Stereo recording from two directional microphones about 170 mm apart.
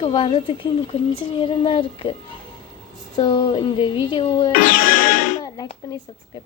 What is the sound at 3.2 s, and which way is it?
A woman's voice, 25° left (ahead or behind).